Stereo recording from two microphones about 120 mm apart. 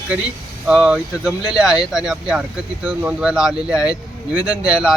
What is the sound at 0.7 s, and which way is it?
Speech, 5° right (ahead or behind).